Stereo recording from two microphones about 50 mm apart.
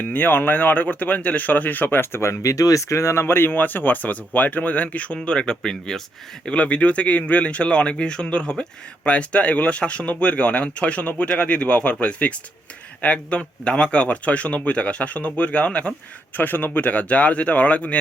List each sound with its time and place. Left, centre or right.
0.0 s speech: left
2.1 s speech: left
16.3 s speech: left